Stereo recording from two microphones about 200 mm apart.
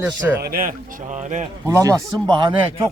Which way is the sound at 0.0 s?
10° right (ahead or behind).